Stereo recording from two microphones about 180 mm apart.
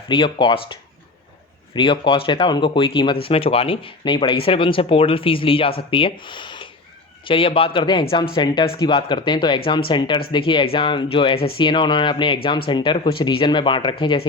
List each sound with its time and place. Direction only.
0.1 s speech: 25° left (ahead or behind)